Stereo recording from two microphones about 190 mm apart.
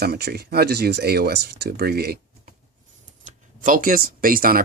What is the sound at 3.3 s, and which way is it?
Speech, 45° right (ahead or behind).